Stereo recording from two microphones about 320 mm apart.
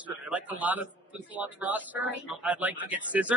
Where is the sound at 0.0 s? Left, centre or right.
Centre.